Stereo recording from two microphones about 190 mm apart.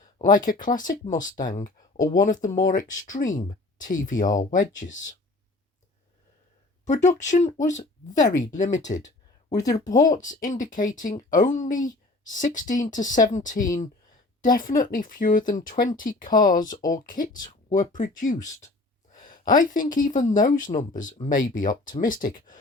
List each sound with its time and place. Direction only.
0.2 s speech: 45° left (ahead or behind)
6.8 s speech: 40° left (ahead or behind)
9.6 s speech: 20° left (ahead or behind)
10.2 s speech: 40° left (ahead or behind)